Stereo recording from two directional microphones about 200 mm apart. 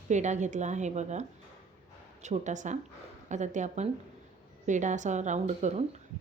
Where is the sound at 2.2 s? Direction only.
35° right (ahead or behind).